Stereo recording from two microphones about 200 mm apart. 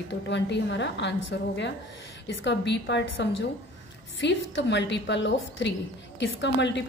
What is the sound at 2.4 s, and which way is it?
A woman's voice, 60° left (ahead or behind).